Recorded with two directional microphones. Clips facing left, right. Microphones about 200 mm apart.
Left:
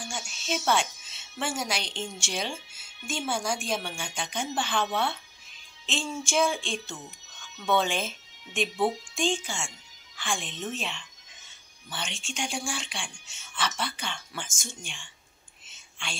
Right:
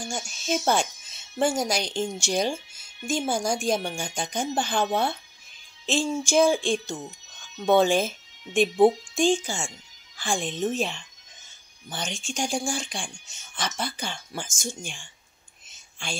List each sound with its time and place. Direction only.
0.7 s speech: 40° right (ahead or behind)
15.7 s whispering: 40° right (ahead or behind)